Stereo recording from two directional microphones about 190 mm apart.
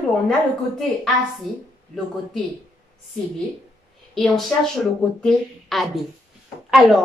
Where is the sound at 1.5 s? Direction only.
Centre (ahead or behind).